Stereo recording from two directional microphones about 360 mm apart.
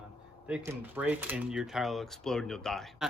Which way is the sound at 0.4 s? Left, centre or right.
Centre.